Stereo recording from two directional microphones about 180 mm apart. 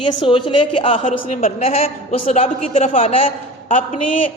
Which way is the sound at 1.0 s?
40° left (ahead or behind).